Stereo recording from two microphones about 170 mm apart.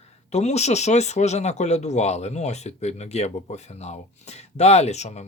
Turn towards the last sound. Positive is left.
turn(degrees=40)  # may be behind; listen again after turning